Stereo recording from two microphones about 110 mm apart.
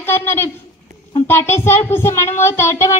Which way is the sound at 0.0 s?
20° left (ahead or behind).